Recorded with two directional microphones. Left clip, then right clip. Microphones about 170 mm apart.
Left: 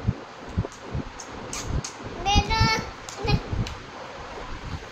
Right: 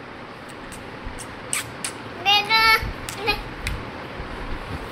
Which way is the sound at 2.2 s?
15° left (ahead or behind).